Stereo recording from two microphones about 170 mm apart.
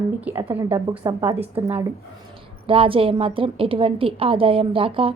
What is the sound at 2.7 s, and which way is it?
A woman's voice, 30° right (ahead or behind).